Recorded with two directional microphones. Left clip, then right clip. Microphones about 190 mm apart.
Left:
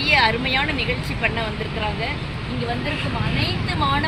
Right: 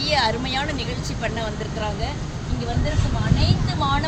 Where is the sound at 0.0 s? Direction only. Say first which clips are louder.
Left 4 dB; 35° right (ahead or behind).